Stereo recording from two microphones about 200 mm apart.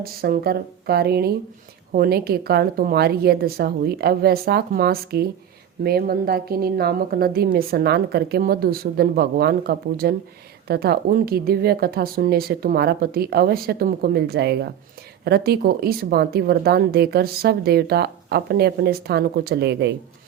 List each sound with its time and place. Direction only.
0.0 s speech: 50° right (ahead or behind)